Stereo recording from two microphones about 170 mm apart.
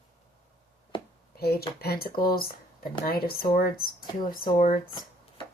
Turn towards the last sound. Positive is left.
turn(degrees=55)  # may be behind; listen again after turning